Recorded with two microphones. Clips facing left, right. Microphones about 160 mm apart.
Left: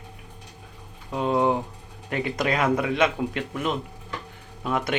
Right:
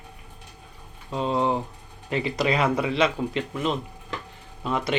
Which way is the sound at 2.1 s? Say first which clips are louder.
Right 1 dB; 55° left (ahead or behind).